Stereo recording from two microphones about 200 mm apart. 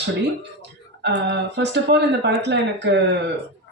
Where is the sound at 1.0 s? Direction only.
60° right (ahead or behind).